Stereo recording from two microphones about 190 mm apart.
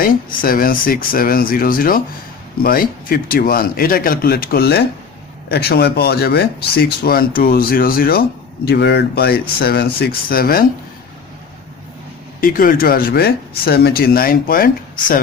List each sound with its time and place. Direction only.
0.0 s speech: 50° left (ahead or behind)
12.4 s speech: 50° left (ahead or behind)